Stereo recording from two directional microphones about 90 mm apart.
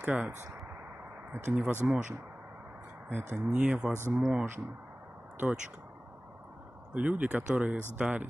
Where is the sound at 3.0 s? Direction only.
20° right (ahead or behind).